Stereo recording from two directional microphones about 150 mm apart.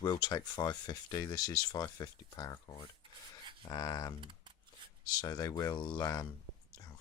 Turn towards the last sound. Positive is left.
turn(degrees=25)  # may be behind; listen again after turning